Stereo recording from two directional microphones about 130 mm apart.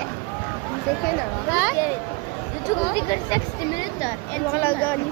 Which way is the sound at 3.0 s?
35° left (ahead or behind).